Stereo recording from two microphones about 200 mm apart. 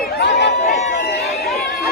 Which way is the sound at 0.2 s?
55° left (ahead or behind).